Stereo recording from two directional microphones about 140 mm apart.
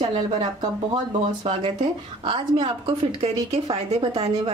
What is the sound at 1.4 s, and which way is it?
A woman's voice, 40° right (ahead or behind).